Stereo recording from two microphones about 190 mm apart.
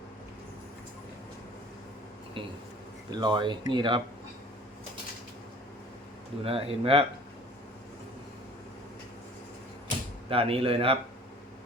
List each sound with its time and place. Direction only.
3.1 s speech: 25° right (ahead or behind)
6.4 s speech: 30° right (ahead or behind)
10.2 s speech: 30° right (ahead or behind)